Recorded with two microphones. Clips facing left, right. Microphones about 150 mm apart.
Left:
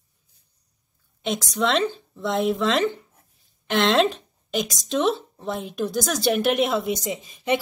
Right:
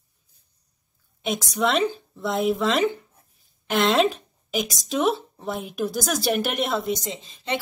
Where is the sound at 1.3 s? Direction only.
5° right (ahead or behind).